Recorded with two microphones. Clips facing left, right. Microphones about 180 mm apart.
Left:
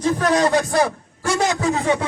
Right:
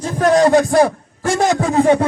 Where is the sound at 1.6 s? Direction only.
40° right (ahead or behind).